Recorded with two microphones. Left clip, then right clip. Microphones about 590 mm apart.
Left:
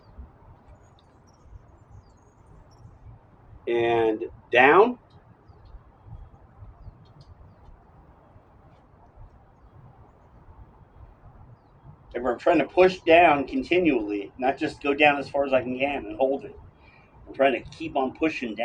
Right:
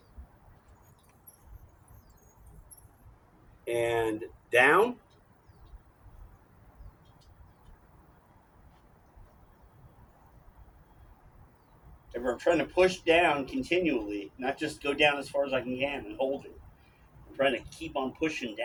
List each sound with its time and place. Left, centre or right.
3.6 s speech: right
12.4 s speech: right